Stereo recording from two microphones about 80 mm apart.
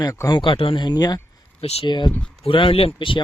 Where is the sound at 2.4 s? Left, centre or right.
Left.